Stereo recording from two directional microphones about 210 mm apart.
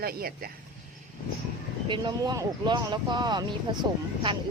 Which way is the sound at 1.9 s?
20° right (ahead or behind).